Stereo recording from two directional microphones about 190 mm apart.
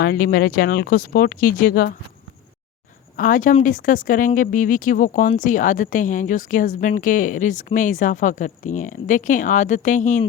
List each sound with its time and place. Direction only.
0.0 s speech: 55° left (ahead or behind)
3.2 s speech: 45° left (ahead or behind)